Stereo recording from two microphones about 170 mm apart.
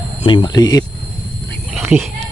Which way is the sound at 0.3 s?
25° left (ahead or behind).